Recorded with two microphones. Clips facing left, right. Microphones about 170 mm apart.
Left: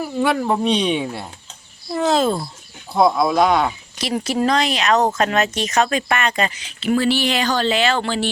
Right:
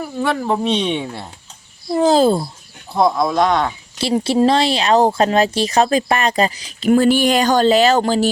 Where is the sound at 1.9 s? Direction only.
30° right (ahead or behind).